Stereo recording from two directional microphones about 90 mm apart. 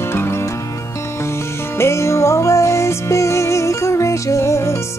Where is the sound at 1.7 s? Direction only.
30° left (ahead or behind).